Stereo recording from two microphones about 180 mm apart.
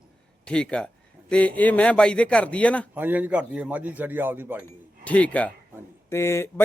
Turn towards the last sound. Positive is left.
turn(degrees=15)  # may be behind; listen again after turning